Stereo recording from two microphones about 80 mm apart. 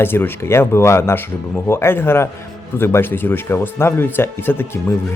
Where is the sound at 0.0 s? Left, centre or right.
Left.